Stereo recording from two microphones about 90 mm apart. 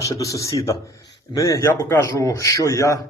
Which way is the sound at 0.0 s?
40° left (ahead or behind).